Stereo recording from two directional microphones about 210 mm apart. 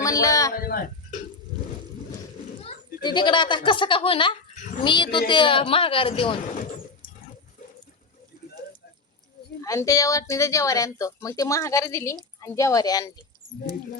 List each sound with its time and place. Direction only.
0.0 s a sound: 15° left (ahead or behind)
0.5 s speech: 45° left (ahead or behind)
2.6 s a woman's voice: 25° left (ahead or behind)
9.6 s a woman's voice: 15° left (ahead or behind)